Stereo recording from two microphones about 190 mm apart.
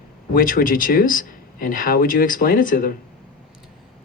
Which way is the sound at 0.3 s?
45° left (ahead or behind).